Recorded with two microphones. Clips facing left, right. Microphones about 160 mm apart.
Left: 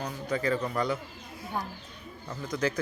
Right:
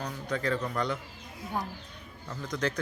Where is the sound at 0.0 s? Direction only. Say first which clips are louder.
Left 2 dB; 5° left (ahead or behind).